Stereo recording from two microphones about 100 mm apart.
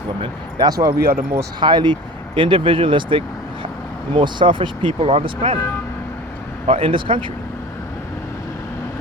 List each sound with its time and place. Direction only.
0.6 s speech: 35° right (ahead or behind)
1.0 s speech: 25° right (ahead or behind)
1.5 s speech: 50° right (ahead or behind); by 5.5 s 80° right
6.7 s speech: 65° right (ahead or behind)